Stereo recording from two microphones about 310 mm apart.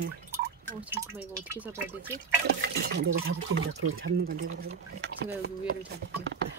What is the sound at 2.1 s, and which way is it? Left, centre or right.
Speech, right.